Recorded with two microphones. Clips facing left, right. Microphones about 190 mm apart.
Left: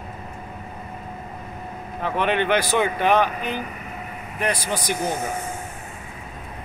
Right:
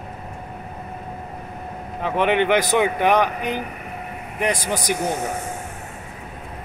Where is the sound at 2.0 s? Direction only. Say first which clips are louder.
Right 3 dB; 15° right (ahead or behind).